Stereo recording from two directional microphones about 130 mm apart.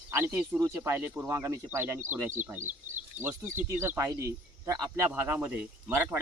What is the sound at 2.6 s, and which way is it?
Speech, 70° right (ahead or behind).